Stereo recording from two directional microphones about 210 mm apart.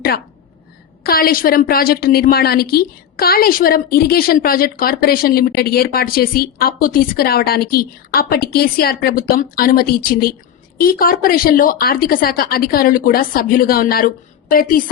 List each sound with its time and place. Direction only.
1.0 s a woman's voice: 45° left (ahead or behind)